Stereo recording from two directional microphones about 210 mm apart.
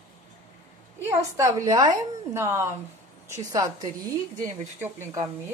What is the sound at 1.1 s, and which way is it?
A woman's voice, 15° right (ahead or behind).